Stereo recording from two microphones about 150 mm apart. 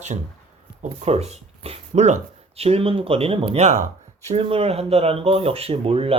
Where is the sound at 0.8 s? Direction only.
45° right (ahead or behind).